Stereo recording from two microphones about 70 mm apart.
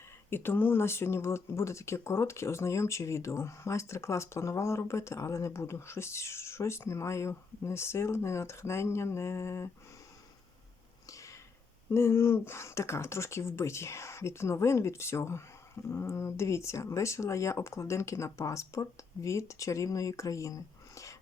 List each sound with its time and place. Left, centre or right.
0.3 s speech: left
11.9 s speech: left